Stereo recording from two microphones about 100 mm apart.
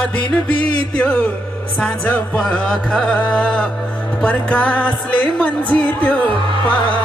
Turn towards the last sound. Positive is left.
turn(degrees=15)  # may be behind; listen again after turning